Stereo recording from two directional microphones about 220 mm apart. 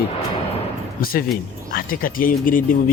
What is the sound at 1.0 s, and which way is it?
A man's voice, 40° left (ahead or behind).